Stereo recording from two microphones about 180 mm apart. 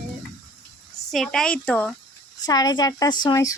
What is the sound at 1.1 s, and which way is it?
Speech, centre (ahead or behind).